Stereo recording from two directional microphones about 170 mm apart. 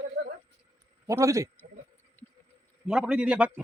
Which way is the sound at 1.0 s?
20° right (ahead or behind).